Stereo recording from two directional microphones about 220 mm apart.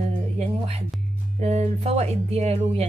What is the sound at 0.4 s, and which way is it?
Music, 30° right (ahead or behind).